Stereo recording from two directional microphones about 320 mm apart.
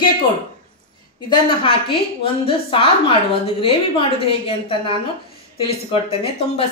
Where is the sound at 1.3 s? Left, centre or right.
Centre.